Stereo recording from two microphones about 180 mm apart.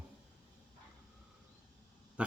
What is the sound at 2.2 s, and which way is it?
Speech, 5° right (ahead or behind).